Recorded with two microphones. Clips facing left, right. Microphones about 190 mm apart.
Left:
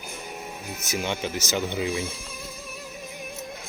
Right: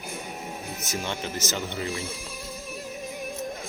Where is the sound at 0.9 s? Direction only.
15° left (ahead or behind).